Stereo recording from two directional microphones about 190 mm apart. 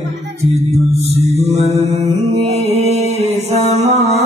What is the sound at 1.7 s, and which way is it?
Mantra, 35° right (ahead or behind).